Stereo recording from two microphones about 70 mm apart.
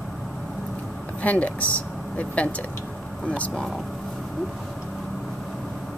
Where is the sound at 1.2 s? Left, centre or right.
Left.